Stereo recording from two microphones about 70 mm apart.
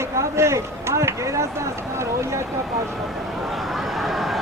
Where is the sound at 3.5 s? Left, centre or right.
Centre.